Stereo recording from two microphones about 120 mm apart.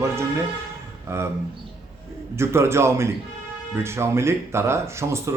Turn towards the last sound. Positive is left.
turn(degrees=-25)  # may be behind; listen again after turning